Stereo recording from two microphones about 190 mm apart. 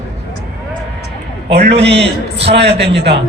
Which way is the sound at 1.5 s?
65° right (ahead or behind).